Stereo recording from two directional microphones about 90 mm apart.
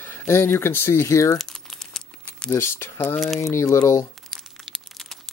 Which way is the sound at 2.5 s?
25° left (ahead or behind).